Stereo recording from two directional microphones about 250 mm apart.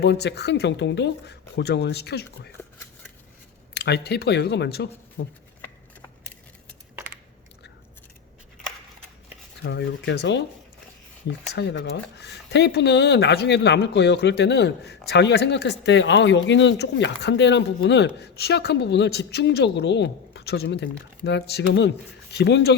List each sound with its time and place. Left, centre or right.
0.0 s speech: left
3.8 s speech: left
9.6 s speech: left